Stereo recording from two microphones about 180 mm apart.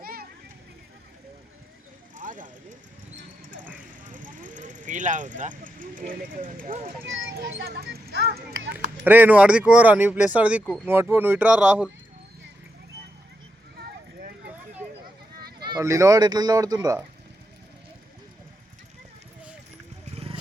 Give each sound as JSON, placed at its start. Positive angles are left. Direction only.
{"t": 0.0, "sound": "a sound", "side_deg": -55}
{"t": 2.1, "sound": "vehicle", "side_deg": -45}
{"t": 4.1, "sound": "vehicle", "side_deg": -45}
{"t": 7.0, "sound": "a child's voice", "side_deg": -90}
{"t": 7.6, "sound": "speech", "side_deg": -60}
{"t": 8.7, "sound": "speech", "side_deg": -10}
{"t": 14.2, "sound": "vehicle", "side_deg": -45}
{"t": 15.6, "sound": "speech", "side_deg": -20}